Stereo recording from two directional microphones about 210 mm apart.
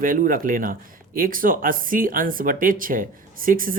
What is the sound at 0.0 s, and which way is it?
Speech, 40° right (ahead or behind).